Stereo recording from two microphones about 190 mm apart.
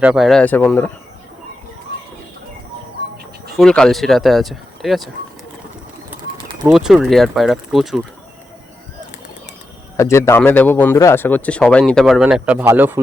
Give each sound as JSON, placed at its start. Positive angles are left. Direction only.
{"t": 0.0, "sound": "speech", "side_deg": -5}
{"t": 3.6, "sound": "speech", "side_deg": 5}
{"t": 6.7, "sound": "speech", "side_deg": 0}
{"t": 10.0, "sound": "speech", "side_deg": 15}